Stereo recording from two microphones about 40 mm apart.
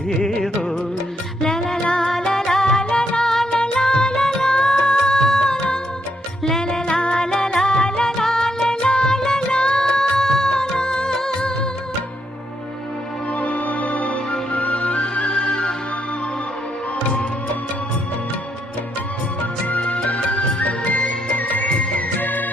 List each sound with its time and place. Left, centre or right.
0.2 s music: centre
5.1 s music: centre
6.7 s music: left
13.3 s music: left; by 15.7 s centre
19.6 s music: left